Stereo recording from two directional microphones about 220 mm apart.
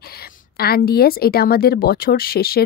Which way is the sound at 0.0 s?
45° left (ahead or behind).